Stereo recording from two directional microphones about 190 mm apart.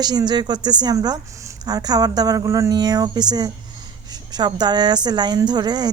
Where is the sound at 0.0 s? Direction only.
20° right (ahead or behind).